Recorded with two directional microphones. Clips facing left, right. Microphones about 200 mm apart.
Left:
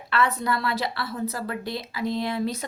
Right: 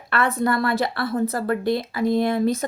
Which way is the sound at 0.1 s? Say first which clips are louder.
Right 3 dB; 50° right (ahead or behind).